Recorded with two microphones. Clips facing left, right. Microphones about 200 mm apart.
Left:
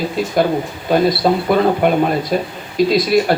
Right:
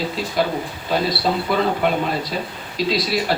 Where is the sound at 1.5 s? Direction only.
50° left (ahead or behind).